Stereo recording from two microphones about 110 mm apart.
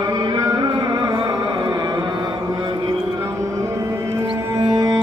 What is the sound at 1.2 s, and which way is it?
Mantra, 40° right (ahead or behind).